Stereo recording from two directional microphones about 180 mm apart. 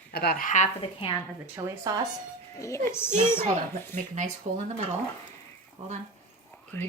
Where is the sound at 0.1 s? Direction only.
60° left (ahead or behind); by 1.2 s 30° left (ahead or behind).